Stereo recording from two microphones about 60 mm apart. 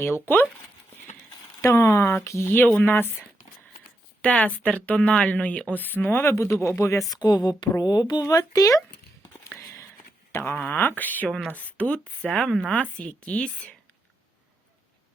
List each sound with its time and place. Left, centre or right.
0.0 s speech: left
1.7 s speech: left
4.2 s a woman's voice: centre
5.8 s speech: left
6.8 s speech: left
10.7 s a woman's voice: left
12.2 s a woman's voice: centre